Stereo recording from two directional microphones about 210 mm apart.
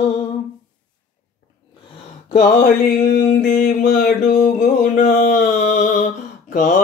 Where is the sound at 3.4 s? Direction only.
40° left (ahead or behind).